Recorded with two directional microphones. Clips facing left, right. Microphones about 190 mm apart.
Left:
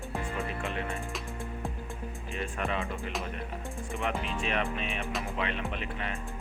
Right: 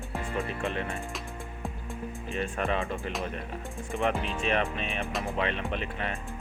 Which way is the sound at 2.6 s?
35° right (ahead or behind).